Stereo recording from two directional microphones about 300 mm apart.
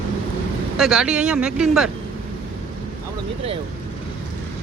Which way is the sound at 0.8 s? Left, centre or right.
Centre.